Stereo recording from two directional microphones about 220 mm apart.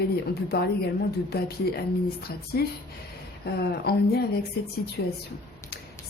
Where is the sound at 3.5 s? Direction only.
45° left (ahead or behind).